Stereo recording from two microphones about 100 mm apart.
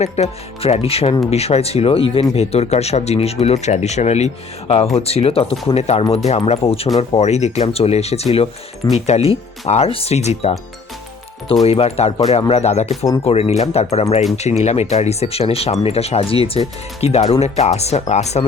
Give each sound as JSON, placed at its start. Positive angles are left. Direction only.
{"t": 0.0, "sound": "speech", "side_deg": 90}
{"t": 1.3, "sound": "speech", "side_deg": 90}
{"t": 2.3, "sound": "speech", "side_deg": 90}
{"t": 11.6, "sound": "speech", "side_deg": 85}